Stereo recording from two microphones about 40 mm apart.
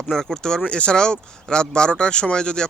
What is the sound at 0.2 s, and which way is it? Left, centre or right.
Speech, centre.